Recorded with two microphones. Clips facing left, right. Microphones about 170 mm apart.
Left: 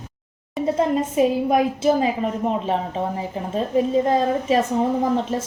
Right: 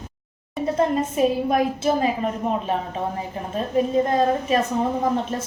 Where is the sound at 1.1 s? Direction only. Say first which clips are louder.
Left 2 dB; 20° left (ahead or behind).